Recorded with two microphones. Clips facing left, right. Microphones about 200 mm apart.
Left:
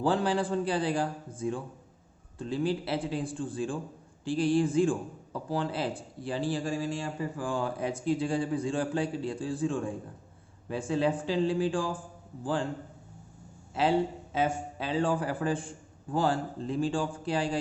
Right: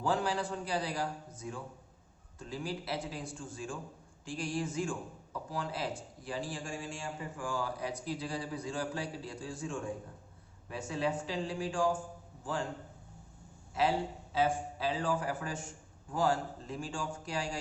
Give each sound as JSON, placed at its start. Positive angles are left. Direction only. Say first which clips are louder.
{"t": 0.0, "sound": "a man's voice", "louder": "left 5 dB", "side_deg": 30}
{"t": 14.3, "sound": "a man's voice", "louder": "left 2 dB", "side_deg": 25}